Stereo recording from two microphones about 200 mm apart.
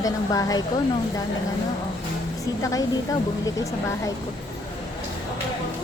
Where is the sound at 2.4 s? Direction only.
15° left (ahead or behind).